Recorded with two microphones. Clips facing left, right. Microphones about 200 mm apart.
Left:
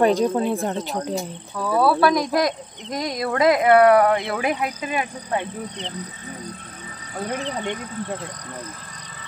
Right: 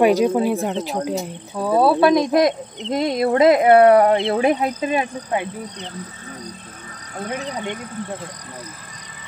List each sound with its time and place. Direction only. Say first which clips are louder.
0.0 s speech: right 3 dB; 10° right (ahead or behind)
1.5 s speech: right 3 dB; 25° right (ahead or behind)
5.3 s speech: left 1 dB; 10° right (ahead or behind)
7.2 s speech: even; 5° right (ahead or behind)